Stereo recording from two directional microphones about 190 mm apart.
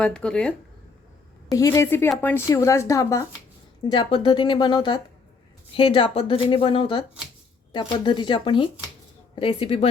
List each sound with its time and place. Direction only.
0.0 s speech: 5° left (ahead or behind)
1.5 s speech: 15° left (ahead or behind)